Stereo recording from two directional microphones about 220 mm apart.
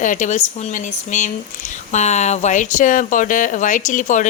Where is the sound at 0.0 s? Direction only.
35° left (ahead or behind).